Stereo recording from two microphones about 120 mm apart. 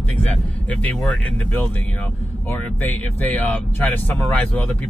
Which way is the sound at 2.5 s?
15° left (ahead or behind).